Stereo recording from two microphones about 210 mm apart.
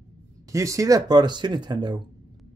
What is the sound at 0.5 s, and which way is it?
Speech, 15° right (ahead or behind).